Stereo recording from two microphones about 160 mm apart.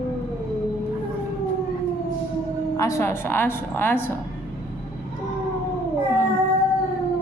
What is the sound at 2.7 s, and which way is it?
A woman's voice, 20° left (ahead or behind).